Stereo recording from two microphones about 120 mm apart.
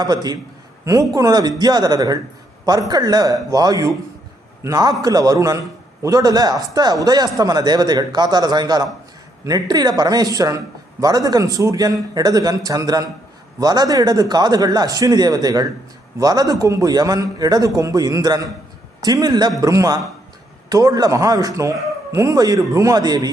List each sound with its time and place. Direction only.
0.0 s a man's voice: 35° right (ahead or behind)